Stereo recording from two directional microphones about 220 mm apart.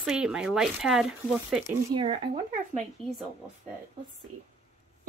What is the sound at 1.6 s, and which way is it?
Speech, 15° right (ahead or behind).